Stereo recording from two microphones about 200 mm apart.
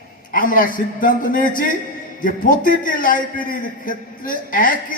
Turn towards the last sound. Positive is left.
turn(degrees=40)  # may be behind; listen again after turning